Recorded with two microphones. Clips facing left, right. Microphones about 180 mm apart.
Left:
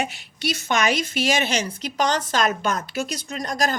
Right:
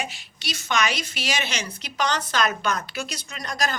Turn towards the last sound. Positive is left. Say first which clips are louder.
# left 4 dB
turn(degrees=45)  # may be behind; listen again after turning